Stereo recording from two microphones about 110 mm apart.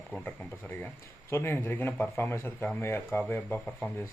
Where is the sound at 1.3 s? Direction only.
25° left (ahead or behind).